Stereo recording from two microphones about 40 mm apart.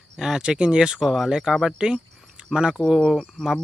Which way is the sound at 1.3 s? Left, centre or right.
Centre.